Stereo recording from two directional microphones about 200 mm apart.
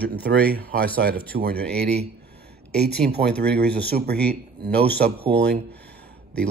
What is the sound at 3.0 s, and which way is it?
Speech, 40° right (ahead or behind).